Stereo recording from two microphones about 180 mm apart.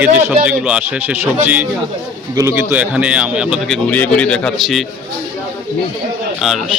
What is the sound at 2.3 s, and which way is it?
A man's voice, 15° right (ahead or behind).